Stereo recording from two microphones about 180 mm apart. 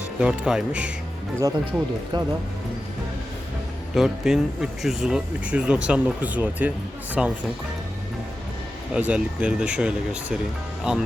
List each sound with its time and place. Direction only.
0.2 s speech: 5° right (ahead or behind)
1.4 s speech: 20° right (ahead or behind)
3.9 s speech: centre (ahead or behind)
8.9 s speech: 5° right (ahead or behind)